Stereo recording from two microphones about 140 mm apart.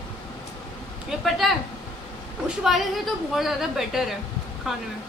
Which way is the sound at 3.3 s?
Centre (ahead or behind).